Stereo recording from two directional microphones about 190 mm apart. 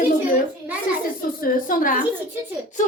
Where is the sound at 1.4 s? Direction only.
45° left (ahead or behind).